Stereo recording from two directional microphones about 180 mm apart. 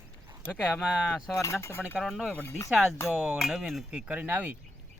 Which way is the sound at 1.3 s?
15° left (ahead or behind).